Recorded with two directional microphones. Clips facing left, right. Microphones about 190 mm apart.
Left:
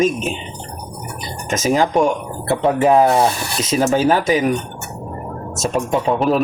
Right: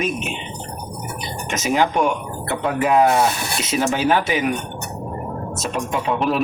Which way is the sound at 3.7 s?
45° left (ahead or behind).